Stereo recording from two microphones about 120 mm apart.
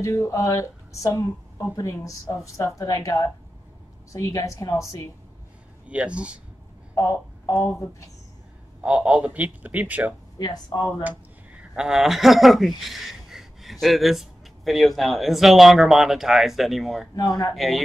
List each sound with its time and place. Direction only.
0.0 s a woman's voice: 25° left (ahead or behind)
5.9 s a man's voice: 10° right (ahead or behind)
7.0 s speech: 25° left (ahead or behind)
8.8 s a man's voice: 10° right (ahead or behind)
10.4 s speech: 35° left (ahead or behind)
11.1 s speech: 10° right (ahead or behind)
17.1 s a woman's voice: 30° left (ahead or behind)